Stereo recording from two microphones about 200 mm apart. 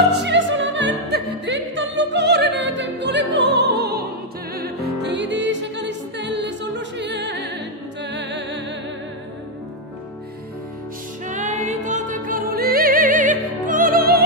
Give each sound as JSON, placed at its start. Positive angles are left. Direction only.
{"t": 0.2, "sound": "opera", "side_deg": -65}
{"t": 4.6, "sound": "music", "side_deg": -55}
{"t": 11.2, "sound": "music", "side_deg": -40}